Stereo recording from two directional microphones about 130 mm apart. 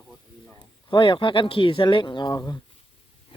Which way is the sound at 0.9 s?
40° left (ahead or behind).